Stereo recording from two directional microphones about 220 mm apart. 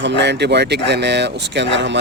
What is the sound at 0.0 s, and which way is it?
Speech, 50° right (ahead or behind).